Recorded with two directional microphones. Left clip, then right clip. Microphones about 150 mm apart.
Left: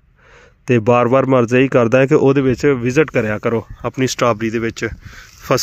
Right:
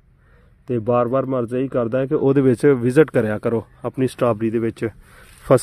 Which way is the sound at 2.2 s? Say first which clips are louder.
Left 1 dB; 10° right (ahead or behind).